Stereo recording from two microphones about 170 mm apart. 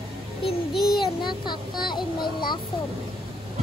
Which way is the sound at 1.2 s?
25° left (ahead or behind).